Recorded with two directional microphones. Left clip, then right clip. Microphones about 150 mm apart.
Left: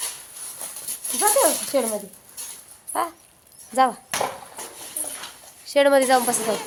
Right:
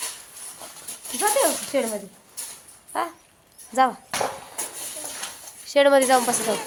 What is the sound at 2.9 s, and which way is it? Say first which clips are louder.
Speech: left 2 dB; 5° left (ahead or behind).